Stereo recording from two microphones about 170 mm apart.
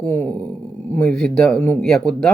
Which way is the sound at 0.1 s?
10° left (ahead or behind).